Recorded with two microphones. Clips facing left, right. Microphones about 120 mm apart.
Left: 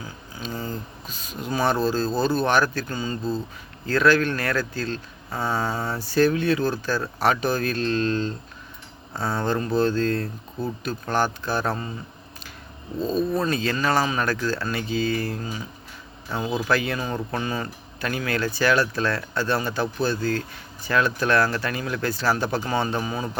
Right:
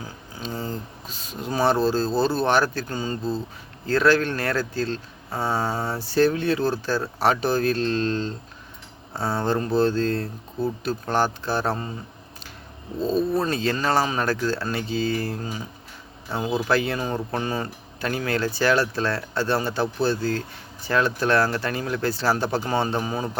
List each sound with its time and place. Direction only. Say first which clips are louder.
0.6 s speech: right 1 dB; 30° right (ahead or behind)
5.5 s a sound: right 1 dB; 10° right (ahead or behind)
6.1 s speech: even; 30° right (ahead or behind)
9.4 s speech: right 1 dB; 30° right (ahead or behind)
13.0 s speech: right 1 dB; 30° right (ahead or behind)
16.3 s a sound: right 1 dB; 10° right (ahead or behind)
16.7 s speech: right 1 dB; 30° right (ahead or behind)